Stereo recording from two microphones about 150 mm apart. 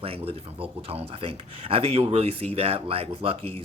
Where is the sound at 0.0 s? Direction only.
40° right (ahead or behind).